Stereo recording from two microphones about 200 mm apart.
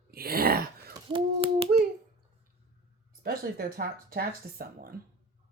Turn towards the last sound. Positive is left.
turn(degrees=-50)  # may be behind; listen again after turning